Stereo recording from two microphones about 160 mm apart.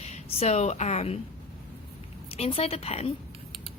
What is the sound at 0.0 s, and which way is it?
A woman's voice, 40° left (ahead or behind).